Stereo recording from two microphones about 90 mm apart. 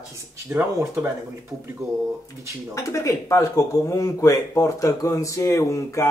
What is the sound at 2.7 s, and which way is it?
A man's voice, 35° left (ahead or behind).